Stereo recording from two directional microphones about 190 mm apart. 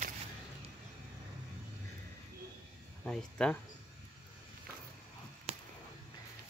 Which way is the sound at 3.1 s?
5° left (ahead or behind).